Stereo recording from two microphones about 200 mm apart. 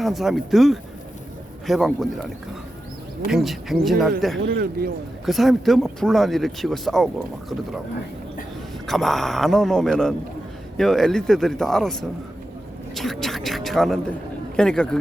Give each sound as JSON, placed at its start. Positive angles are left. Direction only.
{"t": 0.0, "sound": "speech", "side_deg": 0}
{"t": 3.2, "sound": "speech", "side_deg": 0}
{"t": 4.4, "sound": "speech", "side_deg": -50}
{"t": 5.2, "sound": "speech", "side_deg": 0}
{"t": 8.9, "sound": "speech", "side_deg": 0}